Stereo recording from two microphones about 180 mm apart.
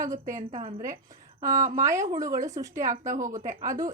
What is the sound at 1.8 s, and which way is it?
A woman's voice, 15° right (ahead or behind).